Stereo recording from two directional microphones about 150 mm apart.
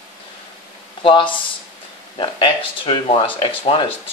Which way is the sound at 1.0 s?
35° left (ahead or behind).